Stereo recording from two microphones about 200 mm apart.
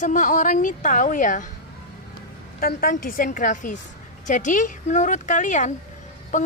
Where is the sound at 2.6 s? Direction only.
45° left (ahead or behind).